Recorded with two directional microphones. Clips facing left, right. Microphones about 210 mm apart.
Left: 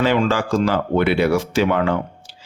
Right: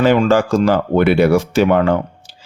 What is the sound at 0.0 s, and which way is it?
A man's voice, 45° right (ahead or behind).